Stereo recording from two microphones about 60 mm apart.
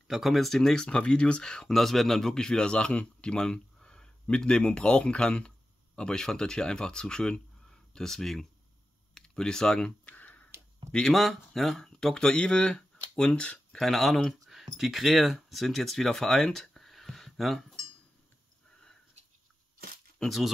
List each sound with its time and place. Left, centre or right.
0.1 s speech: centre
10.0 s a sound: left
10.9 s speech: centre
13.7 s speech: centre
20.2 s speech: centre